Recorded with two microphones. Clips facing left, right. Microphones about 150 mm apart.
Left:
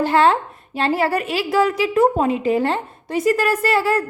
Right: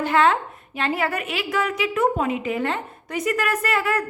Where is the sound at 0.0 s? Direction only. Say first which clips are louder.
Left 3 dB; 35° left (ahead or behind).